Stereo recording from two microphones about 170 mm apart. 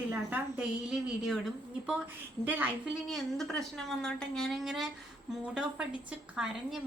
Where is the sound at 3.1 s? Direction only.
Centre (ahead or behind).